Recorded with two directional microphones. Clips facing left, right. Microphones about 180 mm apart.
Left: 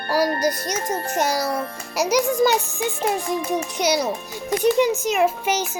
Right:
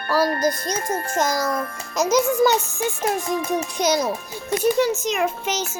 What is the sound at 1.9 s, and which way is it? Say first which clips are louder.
A child's voice: right 1 dB; 15° left (ahead or behind).